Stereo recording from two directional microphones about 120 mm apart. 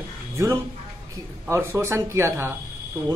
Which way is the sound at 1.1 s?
20° right (ahead or behind).